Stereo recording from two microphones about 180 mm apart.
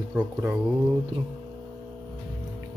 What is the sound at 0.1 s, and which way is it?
Speech, 10° right (ahead or behind).